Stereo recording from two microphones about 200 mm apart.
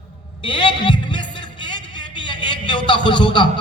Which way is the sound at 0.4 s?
25° left (ahead or behind).